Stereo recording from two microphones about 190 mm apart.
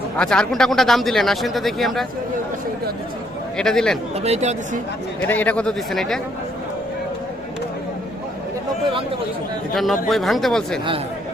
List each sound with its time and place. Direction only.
0.2 s speech: 5° left (ahead or behind)
3.6 s speech: 5° left (ahead or behind)
4.2 s speech: 35° right (ahead or behind)
5.2 s speech: 10° left (ahead or behind)
9.7 s speech: centre (ahead or behind)